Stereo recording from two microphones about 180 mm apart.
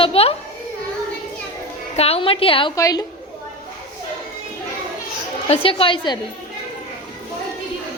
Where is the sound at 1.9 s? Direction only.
35° left (ahead or behind).